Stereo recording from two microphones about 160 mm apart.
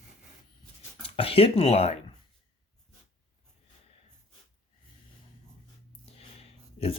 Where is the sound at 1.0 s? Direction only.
35° left (ahead or behind).